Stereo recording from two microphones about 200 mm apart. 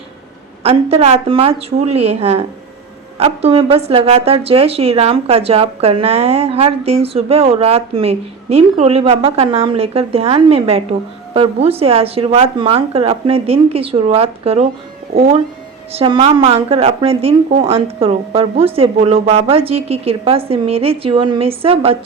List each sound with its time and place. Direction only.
0.6 s a woman's voice: 30° right (ahead or behind)